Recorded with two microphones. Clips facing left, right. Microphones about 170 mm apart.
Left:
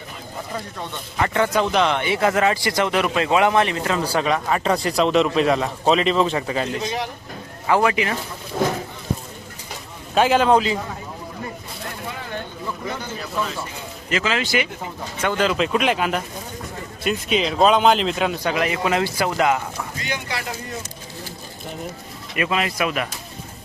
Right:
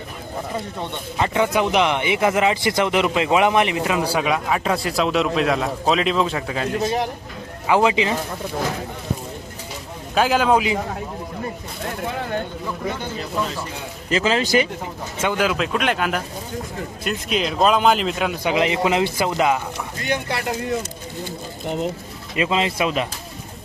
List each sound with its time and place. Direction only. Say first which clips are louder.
0.8 s speech: even; 20° right (ahead or behind); by 6.7 s centre (ahead or behind)
6.8 s speech: right 4 dB; 50° right (ahead or behind)
7.7 s speech: right 1 dB; 20° right (ahead or behind)
10.2 s a man's voice: left 1 dB; centre (ahead or behind)
14.1 s a man's voice: right 4 dB; 35° right (ahead or behind)
15.2 s a man's voice: even; 10° right (ahead or behind)
18.4 s speech: right 6 dB; 20° right (ahead or behind)
20.0 s speech: right 6 dB; 55° right (ahead or behind)
22.4 s speech: right 2 dB; 25° right (ahead or behind)